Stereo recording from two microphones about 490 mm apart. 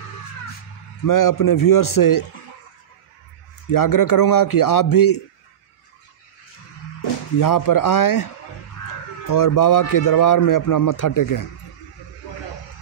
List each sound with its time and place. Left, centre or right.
1.0 s a man's voice: left
3.7 s a man's voice: left
7.3 s a man's voice: left
9.3 s a man's voice: left